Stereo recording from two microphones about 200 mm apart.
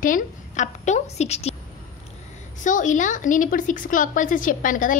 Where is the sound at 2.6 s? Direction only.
40° left (ahead or behind).